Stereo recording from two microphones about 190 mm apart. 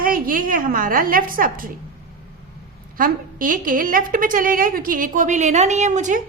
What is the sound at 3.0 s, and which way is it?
A woman's voice, 45° right (ahead or behind).